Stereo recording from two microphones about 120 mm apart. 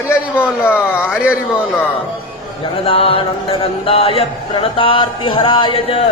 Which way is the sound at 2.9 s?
50° left (ahead or behind).